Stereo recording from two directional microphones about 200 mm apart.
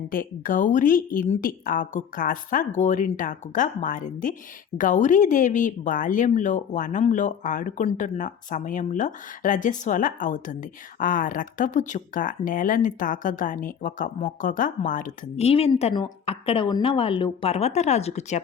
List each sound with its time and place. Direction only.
0.1 s speech: 45° left (ahead or behind)